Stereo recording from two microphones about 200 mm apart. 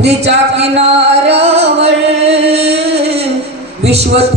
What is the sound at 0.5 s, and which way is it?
Music, 30° right (ahead or behind).